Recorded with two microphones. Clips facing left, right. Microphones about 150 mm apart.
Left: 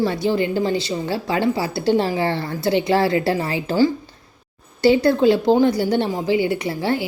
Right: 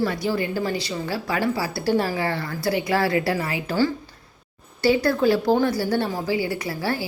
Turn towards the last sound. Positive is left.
turn(degrees=20)  # may be behind; listen again after turning